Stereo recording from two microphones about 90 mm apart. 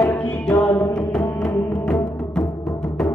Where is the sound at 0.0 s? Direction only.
10° left (ahead or behind).